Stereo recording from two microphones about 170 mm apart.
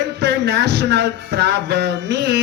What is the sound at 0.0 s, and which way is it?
Music, 90° right.